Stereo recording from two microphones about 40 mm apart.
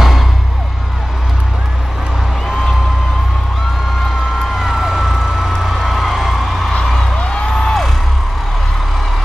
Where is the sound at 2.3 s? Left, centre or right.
Centre.